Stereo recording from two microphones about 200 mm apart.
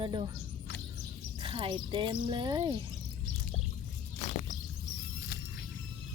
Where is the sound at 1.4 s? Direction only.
25° right (ahead or behind).